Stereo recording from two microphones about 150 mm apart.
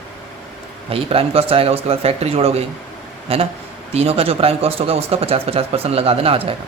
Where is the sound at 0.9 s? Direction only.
40° right (ahead or behind).